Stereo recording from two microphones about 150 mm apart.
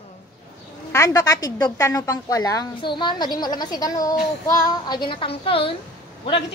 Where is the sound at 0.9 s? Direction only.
20° left (ahead or behind); by 5.7 s 40° left (ahead or behind).